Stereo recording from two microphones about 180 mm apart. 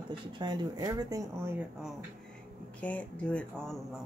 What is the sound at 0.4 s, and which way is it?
Speech, 20° right (ahead or behind).